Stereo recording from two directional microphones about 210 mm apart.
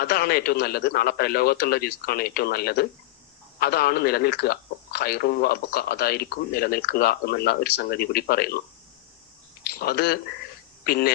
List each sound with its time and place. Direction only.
0.0 s a man's voice: 45° left (ahead or behind)
9.7 s a man's voice: 45° left (ahead or behind)